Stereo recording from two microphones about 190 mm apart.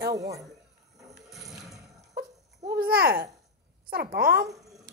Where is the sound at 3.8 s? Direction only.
50° right (ahead or behind).